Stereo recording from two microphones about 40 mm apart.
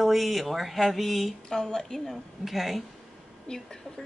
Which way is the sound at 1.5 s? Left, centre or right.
Centre.